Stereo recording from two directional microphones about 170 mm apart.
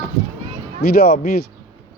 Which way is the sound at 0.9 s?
70° left (ahead or behind).